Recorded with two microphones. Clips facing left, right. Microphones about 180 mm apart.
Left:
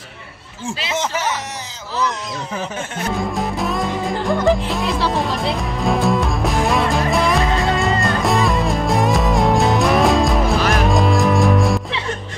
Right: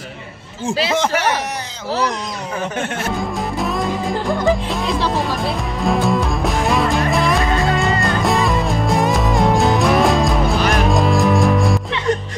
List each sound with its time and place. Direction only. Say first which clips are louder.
1.0 s speech: right 4 dB; 65° right (ahead or behind)
3.2 s music: even; centre (ahead or behind)